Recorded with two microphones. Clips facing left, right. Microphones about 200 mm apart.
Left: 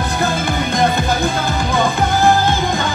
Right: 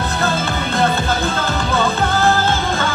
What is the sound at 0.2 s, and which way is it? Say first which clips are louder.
Music: left 2 dB; 15° left (ahead or behind).